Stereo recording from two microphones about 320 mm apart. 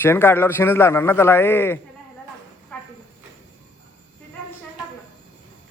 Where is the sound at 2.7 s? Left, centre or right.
Centre.